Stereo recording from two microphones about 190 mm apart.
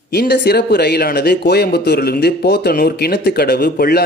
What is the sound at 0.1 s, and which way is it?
Speech, 60° left (ahead or behind).